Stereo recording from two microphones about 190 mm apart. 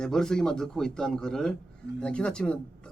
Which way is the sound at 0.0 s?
5° left (ahead or behind).